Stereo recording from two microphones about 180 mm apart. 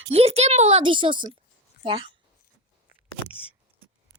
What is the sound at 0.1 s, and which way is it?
A woman's voice, 35° right (ahead or behind).